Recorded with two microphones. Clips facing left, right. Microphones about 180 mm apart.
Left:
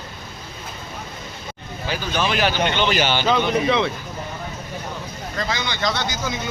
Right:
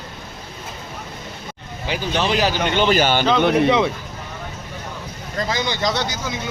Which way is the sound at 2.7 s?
45° right (ahead or behind).